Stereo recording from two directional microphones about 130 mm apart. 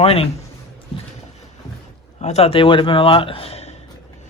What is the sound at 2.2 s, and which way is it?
A man's voice, 60° left (ahead or behind).